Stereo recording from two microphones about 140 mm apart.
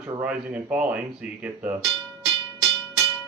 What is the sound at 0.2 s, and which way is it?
Speech, 10° right (ahead or behind).